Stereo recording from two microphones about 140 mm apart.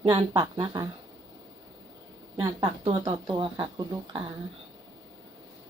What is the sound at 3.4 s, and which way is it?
Speech, 30° right (ahead or behind).